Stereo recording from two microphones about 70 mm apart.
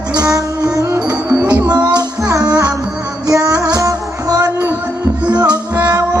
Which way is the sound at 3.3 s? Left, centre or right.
Right.